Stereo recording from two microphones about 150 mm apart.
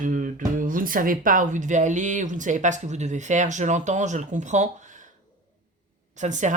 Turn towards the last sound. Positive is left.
turn(degrees=-55)  # may be behind; listen again after turning